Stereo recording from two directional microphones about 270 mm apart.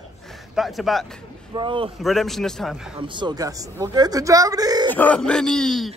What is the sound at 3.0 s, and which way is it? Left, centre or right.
Speech, centre.